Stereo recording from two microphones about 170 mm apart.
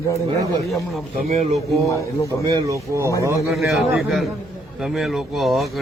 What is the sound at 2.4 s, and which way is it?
Speech, 20° right (ahead or behind).